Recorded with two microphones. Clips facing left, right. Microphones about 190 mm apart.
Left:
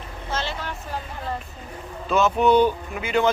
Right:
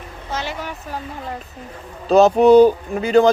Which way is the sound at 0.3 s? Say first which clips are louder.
Right 2 dB; 15° right (ahead or behind).